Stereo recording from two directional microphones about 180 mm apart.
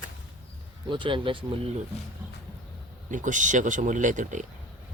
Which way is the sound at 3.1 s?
45° right (ahead or behind).